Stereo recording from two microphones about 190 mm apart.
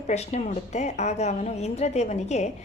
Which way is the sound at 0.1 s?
35° left (ahead or behind).